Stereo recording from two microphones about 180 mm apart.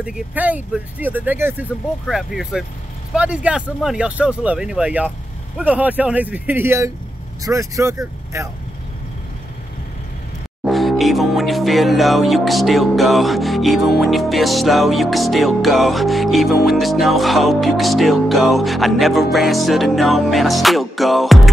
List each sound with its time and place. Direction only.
0.0 s speech: 5° right (ahead or behind)
3.2 s music: 5° right (ahead or behind)
5.6 s speech: 10° right (ahead or behind)
10.6 s music: centre (ahead or behind)